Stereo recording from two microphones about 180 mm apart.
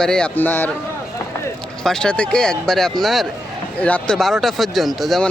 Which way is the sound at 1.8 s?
5° left (ahead or behind).